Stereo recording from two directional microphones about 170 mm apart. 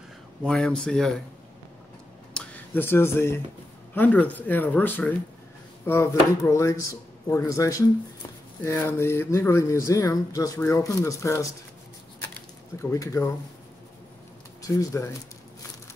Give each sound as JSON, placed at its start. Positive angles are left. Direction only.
{"t": 0.4, "sound": "speech", "side_deg": 5}
{"t": 2.3, "sound": "a sound", "side_deg": 10}
{"t": 3.9, "sound": "speech", "side_deg": 10}
{"t": 12.9, "sound": "speech", "side_deg": 20}
{"t": 14.6, "sound": "speech", "side_deg": 20}